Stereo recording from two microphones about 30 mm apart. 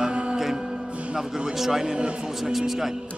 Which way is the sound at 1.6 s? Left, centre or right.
Centre.